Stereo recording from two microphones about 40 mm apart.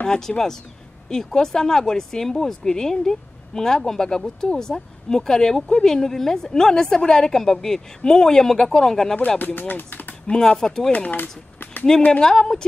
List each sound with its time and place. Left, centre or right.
0.0 s a woman's voice: centre
9.4 s speech: left
10.3 s a woman's voice: centre
12.1 s a woman's voice: centre